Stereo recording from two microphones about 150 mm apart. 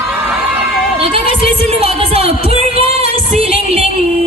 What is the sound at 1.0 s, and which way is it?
Music, 40° right (ahead or behind).